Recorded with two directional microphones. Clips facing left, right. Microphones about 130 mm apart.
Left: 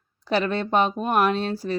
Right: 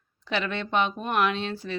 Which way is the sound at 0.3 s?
40° left (ahead or behind).